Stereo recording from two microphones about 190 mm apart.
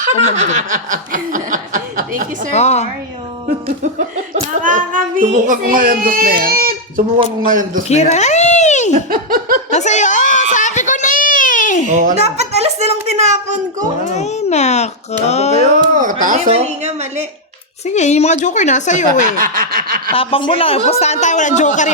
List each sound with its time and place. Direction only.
0.0 s snicker: 40° right (ahead or behind)
2.5 s a man's voice: 35° left (ahead or behind)
4.6 s a child's voice: 45° right (ahead or behind)
7.9 s a sound: 35° left (ahead or behind)
9.0 s laughter: 50° right (ahead or behind)
9.7 s chuckle: 40° left (ahead or behind)
10.5 s a sound: 40° left (ahead or behind)
11.9 s speech: 40° right (ahead or behind)
14.2 s a child's voice: 35° left (ahead or behind)
16.0 s a woman's voice: 45° right (ahead or behind)
17.8 s a man's voice: 40° left (ahead or behind)
19.4 s a child's voice: 50° right (ahead or behind)
20.1 s a man's voice: 30° left (ahead or behind)